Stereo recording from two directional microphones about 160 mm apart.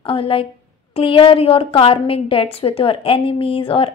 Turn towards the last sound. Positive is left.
turn(degrees=35)  # may be behind; listen again after turning